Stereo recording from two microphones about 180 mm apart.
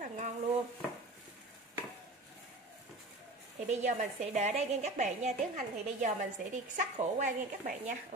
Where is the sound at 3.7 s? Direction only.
40° right (ahead or behind).